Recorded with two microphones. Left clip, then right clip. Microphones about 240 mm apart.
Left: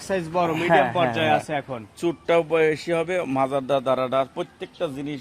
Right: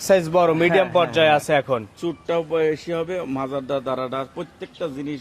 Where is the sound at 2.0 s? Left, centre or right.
Left.